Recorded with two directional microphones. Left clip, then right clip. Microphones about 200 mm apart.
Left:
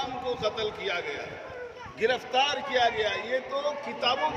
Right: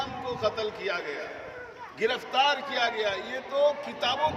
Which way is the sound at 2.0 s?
15° right (ahead or behind).